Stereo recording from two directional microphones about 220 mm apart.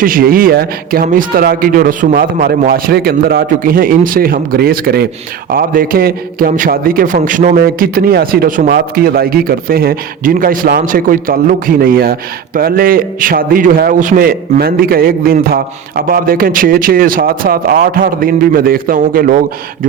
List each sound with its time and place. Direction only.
0.0 s a man's voice: 40° right (ahead or behind)